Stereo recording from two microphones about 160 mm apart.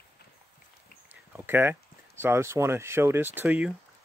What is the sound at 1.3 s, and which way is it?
Speech, 15° right (ahead or behind).